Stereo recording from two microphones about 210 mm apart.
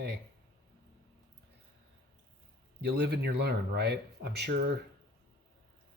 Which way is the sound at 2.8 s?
50° right (ahead or behind).